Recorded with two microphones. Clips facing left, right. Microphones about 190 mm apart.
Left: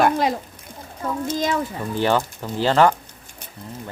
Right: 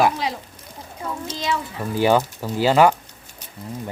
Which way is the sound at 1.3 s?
50° left (ahead or behind).